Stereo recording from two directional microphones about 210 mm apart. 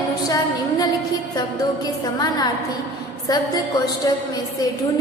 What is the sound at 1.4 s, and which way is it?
A woman's voice, 20° left (ahead or behind).